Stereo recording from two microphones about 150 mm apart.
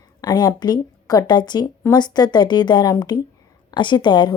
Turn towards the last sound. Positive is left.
turn(degrees=30)  # may be behind; listen again after turning